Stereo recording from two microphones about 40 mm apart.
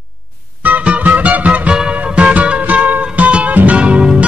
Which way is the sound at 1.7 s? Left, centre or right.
Right.